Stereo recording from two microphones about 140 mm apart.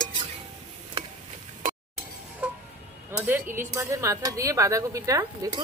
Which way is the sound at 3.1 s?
15° right (ahead or behind).